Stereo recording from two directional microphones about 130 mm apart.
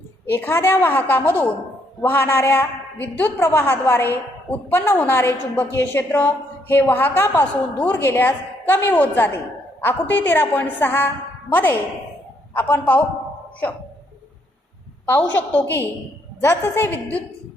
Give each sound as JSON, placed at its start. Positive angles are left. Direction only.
{"t": 0.3, "sound": "a woman's voice", "side_deg": 15}
{"t": 15.0, "sound": "a woman's voice", "side_deg": 15}